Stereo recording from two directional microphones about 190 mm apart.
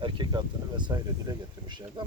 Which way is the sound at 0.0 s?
25° right (ahead or behind).